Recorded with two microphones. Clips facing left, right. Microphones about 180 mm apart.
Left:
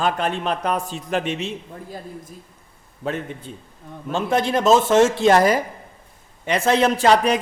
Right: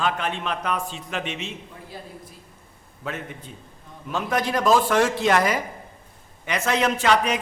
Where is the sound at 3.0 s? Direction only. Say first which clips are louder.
Left 6 dB; 30° left (ahead or behind).